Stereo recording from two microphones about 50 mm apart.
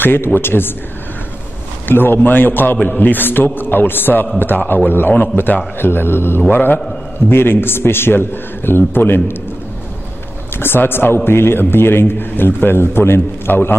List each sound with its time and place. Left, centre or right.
0.0 s a man's voice: left
1.9 s a man's voice: left
5.8 s a man's voice: left
10.6 s a man's voice: left